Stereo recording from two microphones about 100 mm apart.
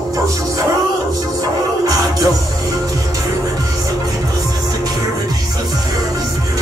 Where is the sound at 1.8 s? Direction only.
35° right (ahead or behind).